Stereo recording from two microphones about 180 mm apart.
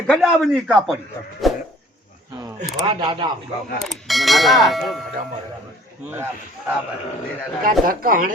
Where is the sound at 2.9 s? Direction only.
25° right (ahead or behind).